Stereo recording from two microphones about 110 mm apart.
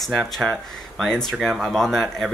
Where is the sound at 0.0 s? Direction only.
Centre (ahead or behind).